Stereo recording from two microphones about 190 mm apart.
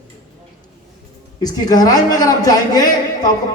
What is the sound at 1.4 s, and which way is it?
A woman's voice, 20° left (ahead or behind).